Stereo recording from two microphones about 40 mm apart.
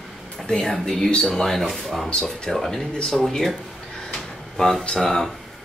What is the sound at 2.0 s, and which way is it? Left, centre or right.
Speech, centre.